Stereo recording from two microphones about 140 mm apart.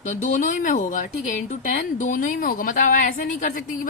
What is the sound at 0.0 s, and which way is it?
Speech, 65° left (ahead or behind).